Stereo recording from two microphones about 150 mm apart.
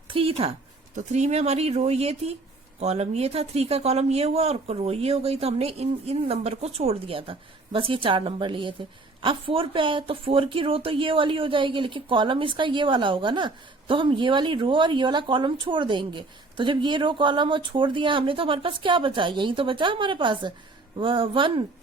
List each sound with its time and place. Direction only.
0.1 s speech: 40° right (ahead or behind)